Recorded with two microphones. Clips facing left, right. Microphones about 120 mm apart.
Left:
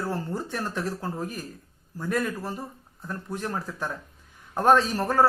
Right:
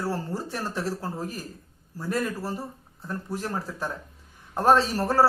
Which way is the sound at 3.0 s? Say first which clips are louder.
Right 1 dB; 35° right (ahead or behind).